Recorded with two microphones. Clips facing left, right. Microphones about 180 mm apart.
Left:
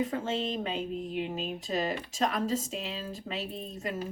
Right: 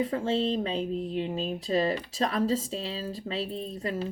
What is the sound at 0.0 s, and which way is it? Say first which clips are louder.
Speech: right 4 dB; 30° right (ahead or behind).